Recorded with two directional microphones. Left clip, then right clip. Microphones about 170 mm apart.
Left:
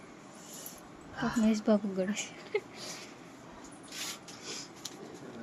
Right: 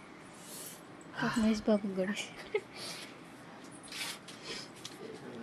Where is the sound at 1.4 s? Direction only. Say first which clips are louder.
Left 4 dB; centre (ahead or behind).